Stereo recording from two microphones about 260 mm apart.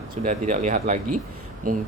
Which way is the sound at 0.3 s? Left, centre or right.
Right.